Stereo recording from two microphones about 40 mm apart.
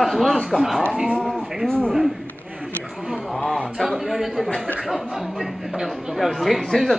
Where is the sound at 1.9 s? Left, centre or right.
Centre.